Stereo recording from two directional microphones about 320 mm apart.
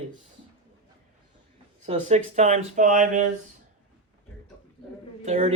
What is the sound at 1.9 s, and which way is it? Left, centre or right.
Speech, right.